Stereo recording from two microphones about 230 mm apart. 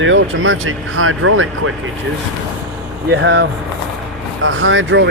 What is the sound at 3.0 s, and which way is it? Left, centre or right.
Speech, right.